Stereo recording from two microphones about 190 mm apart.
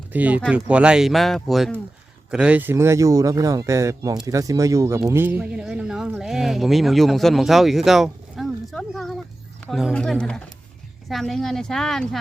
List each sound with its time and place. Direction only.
0.1 s speech: 10° right (ahead or behind)